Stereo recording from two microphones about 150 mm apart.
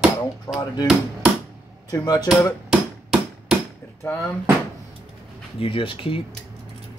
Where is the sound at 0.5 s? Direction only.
30° left (ahead or behind).